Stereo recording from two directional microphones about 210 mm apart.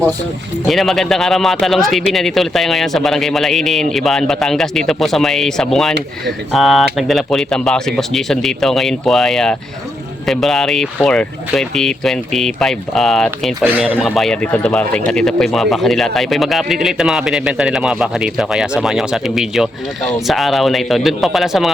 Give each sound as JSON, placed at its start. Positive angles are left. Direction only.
{"t": 0.7, "sound": "speech", "side_deg": 0}